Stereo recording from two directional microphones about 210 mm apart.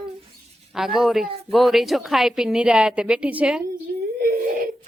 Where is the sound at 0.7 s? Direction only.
Centre (ahead or behind).